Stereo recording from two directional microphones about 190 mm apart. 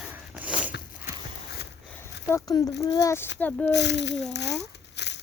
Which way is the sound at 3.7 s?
65° left (ahead or behind).